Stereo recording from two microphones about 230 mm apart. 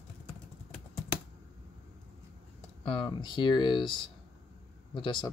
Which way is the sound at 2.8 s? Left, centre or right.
Left.